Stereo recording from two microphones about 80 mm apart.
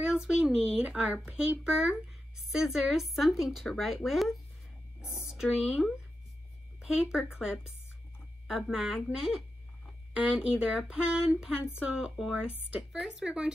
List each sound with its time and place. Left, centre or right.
0.0 s speech: centre